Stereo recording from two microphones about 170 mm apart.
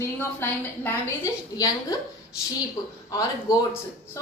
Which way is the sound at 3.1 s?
20° left (ahead or behind).